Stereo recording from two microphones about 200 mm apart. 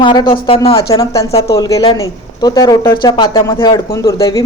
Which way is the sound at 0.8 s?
15° left (ahead or behind).